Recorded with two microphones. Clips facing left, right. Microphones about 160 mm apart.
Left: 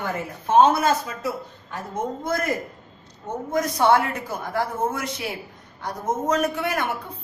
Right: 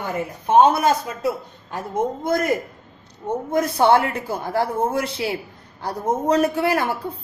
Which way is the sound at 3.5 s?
30° right (ahead or behind).